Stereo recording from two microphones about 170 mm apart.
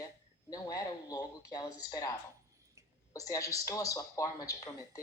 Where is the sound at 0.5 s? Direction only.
20° left (ahead or behind).